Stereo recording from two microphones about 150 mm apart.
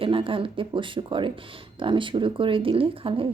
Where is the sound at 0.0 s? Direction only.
35° right (ahead or behind).